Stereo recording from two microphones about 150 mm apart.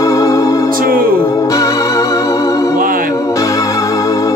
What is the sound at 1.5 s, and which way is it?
Music, 20° left (ahead or behind).